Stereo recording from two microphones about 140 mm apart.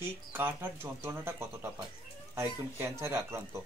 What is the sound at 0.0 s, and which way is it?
Speech, 15° right (ahead or behind).